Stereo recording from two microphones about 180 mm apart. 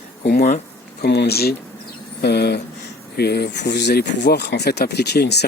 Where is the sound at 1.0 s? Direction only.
65° left (ahead or behind).